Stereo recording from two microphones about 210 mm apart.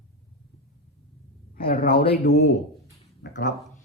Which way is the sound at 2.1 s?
50° left (ahead or behind).